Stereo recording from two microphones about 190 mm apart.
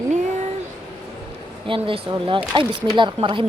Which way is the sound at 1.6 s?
25° right (ahead or behind).